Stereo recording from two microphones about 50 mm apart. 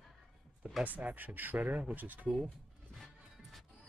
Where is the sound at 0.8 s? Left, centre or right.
Right.